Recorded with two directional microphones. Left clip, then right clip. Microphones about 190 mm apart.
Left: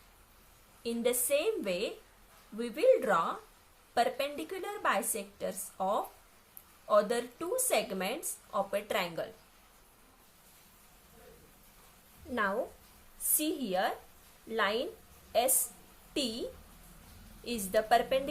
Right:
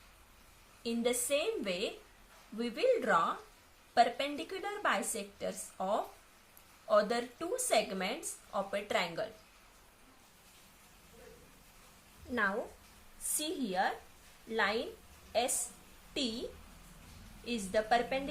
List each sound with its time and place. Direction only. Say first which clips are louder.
0.8 s a woman's voice: left 2 dB; 25° left (ahead or behind)
12.3 s a woman's voice: left 1 dB; 25° left (ahead or behind)
17.4 s speech: left 3 dB; 35° left (ahead or behind)